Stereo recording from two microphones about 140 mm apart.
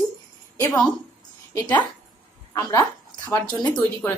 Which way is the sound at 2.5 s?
25° left (ahead or behind).